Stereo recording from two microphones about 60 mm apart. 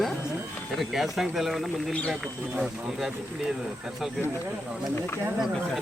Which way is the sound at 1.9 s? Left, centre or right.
Left.